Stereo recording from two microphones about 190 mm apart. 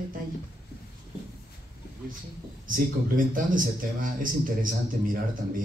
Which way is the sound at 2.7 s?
45° right (ahead or behind).